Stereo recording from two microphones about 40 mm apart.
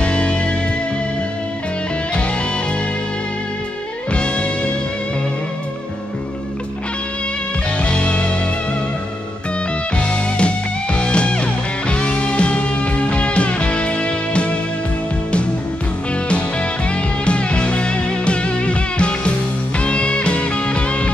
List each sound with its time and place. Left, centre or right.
0.0 s music: left
4.1 s music: left
7.8 s music: left
9.9 s music: left
16.9 s music: left